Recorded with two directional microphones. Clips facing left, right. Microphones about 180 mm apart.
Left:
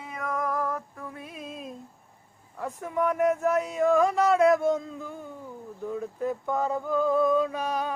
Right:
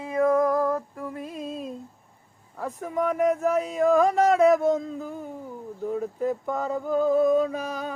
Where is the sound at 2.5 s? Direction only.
90° right.